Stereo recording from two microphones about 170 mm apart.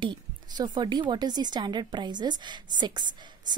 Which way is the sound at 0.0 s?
25° right (ahead or behind).